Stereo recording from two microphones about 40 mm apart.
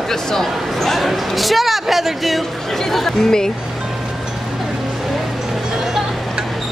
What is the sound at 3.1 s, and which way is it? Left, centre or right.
Speech, centre.